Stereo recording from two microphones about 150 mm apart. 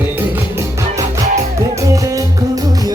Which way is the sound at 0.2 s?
20° right (ahead or behind).